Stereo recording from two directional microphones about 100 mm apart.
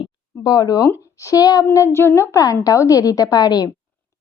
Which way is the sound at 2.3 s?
35° left (ahead or behind).